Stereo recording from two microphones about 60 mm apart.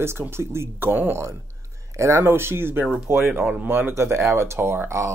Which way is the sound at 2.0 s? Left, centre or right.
Right.